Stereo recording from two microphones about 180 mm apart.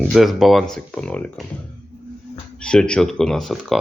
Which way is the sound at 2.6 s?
5° left (ahead or behind).